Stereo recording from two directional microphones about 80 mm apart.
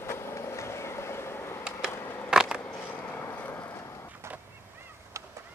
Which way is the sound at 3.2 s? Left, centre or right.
Left.